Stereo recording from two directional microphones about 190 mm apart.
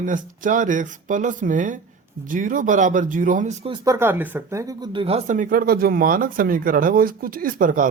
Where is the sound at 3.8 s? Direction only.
15° right (ahead or behind); by 7.8 s 45° right (ahead or behind).